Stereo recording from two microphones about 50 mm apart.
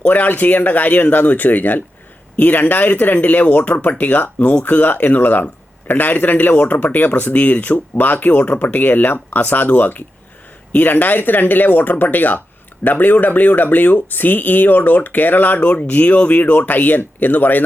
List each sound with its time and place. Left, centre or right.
0.1 s speech: left